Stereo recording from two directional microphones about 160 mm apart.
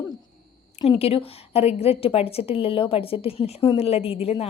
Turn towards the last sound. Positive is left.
turn(degrees=40)  # may be behind; listen again after turning